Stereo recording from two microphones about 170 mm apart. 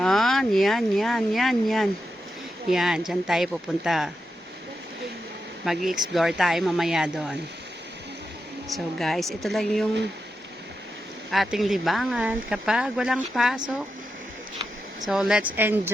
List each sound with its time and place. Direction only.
0.0 s speech: centre (ahead or behind)
5.6 s speech: centre (ahead or behind)
8.7 s speech: centre (ahead or behind)
11.3 s speech: centre (ahead or behind)
15.0 s speech: centre (ahead or behind)